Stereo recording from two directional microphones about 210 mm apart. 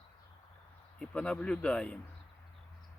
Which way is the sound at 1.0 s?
5° left (ahead or behind).